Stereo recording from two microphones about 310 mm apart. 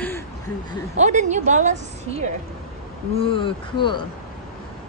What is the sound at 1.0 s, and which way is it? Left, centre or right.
Speech, right.